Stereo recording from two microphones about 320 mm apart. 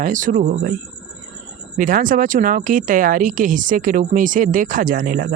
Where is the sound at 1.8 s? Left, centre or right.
Right.